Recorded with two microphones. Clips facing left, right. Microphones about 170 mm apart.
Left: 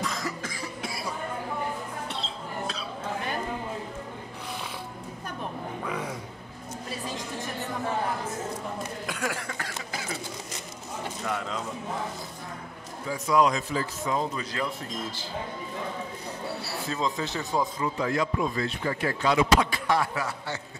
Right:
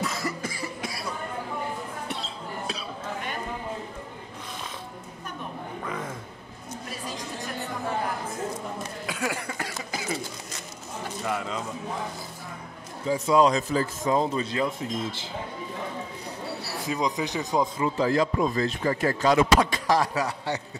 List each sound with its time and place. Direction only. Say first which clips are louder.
0.0 s cough: right 2 dB; 5° right (ahead or behind)
5.9 s music: left 1 dB; 5° left (ahead or behind)
9.0 s a sound: right 4 dB; 5° right (ahead or behind)
11.2 s bird: right 2 dB; 5° right (ahead or behind)
13.1 s speech: right 3 dB; 30° right (ahead or behind)
16.8 s speech: right 3 dB; 15° right (ahead or behind)
17.9 s speech: right 5 dB; 35° right (ahead or behind)